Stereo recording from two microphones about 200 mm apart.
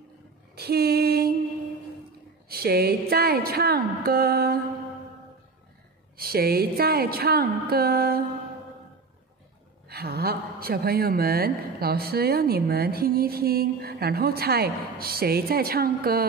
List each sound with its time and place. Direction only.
0.6 s a sound: 50° right (ahead or behind)
2.4 s a woman's voice: 50° right (ahead or behind)
6.1 s a woman's voice: 50° right (ahead or behind)
9.8 s a woman's voice: 50° right (ahead or behind)